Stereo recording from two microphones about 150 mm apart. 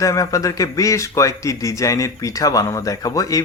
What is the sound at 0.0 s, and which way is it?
Speech, 20° left (ahead or behind).